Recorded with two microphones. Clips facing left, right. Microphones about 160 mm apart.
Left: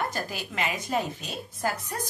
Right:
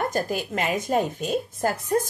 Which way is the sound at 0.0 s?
50° right (ahead or behind).